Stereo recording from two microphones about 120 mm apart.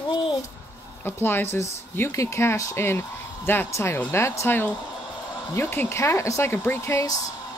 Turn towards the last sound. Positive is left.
turn(degrees=30)  # may be behind; listen again after turning